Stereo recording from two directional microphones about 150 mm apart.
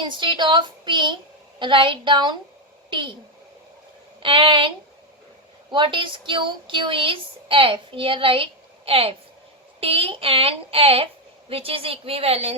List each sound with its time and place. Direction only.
0.0 s a woman's voice: 30° right (ahead or behind)
4.2 s a woman's voice: 35° right (ahead or behind)
5.7 s a woman's voice: 35° right (ahead or behind)